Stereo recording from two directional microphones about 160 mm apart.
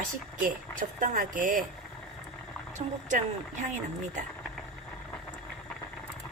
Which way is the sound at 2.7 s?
50° right (ahead or behind).